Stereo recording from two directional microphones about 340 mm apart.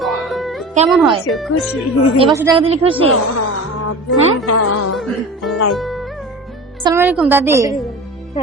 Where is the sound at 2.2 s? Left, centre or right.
Centre.